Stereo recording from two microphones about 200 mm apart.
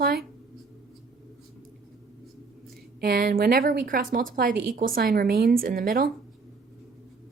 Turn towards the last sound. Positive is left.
turn(degrees=-45)  # may be behind; listen again after turning